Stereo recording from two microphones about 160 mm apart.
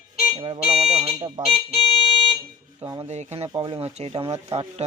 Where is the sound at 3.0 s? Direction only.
40° right (ahead or behind).